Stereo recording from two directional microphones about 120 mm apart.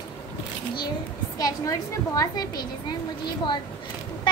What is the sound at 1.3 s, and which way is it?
A woman's voice, 30° left (ahead or behind).